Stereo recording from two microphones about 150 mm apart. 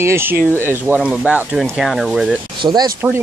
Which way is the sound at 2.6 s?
30° right (ahead or behind).